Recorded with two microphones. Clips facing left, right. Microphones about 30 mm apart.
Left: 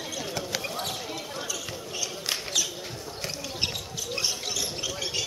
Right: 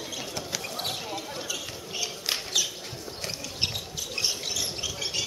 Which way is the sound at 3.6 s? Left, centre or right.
Centre.